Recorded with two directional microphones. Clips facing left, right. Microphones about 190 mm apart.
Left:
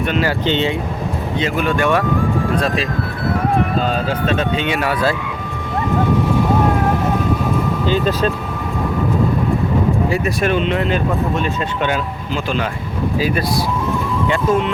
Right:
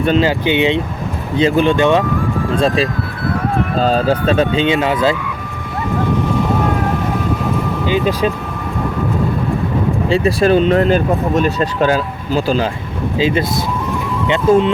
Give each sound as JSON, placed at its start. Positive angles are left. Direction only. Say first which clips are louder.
{"t": 0.0, "sound": "speech", "louder": "right 5 dB", "side_deg": -35}
{"t": 0.3, "sound": "speech", "louder": "right 3 dB", "side_deg": -15}
{"t": 1.4, "sound": "speech", "louder": "right 6 dB", "side_deg": -30}
{"t": 7.9, "sound": "speech", "louder": "right 2 dB", "side_deg": -10}
{"t": 10.1, "sound": "speech", "louder": "right 5 dB", "side_deg": -30}
{"t": 13.1, "sound": "speech", "louder": "right 4 dB", "side_deg": -25}
{"t": 14.5, "sound": "speech", "louder": "right 7 dB", "side_deg": -30}